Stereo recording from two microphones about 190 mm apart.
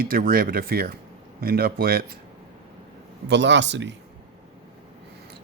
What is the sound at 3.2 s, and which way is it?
Speech, 70° right (ahead or behind).